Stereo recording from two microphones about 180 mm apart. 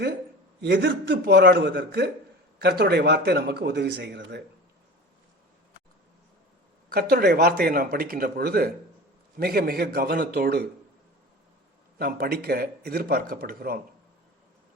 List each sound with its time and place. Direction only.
0.6 s speech: 70° right (ahead or behind)
6.9 s speech: 60° right (ahead or behind)
11.9 s speech: 55° right (ahead or behind)